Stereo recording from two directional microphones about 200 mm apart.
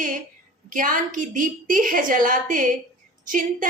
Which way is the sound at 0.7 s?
40° right (ahead or behind).